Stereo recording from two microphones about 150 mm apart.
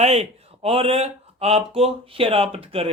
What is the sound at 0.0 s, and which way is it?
Speech, 45° right (ahead or behind).